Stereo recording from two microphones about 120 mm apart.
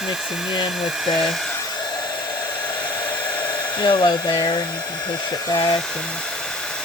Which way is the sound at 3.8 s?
35° left (ahead or behind).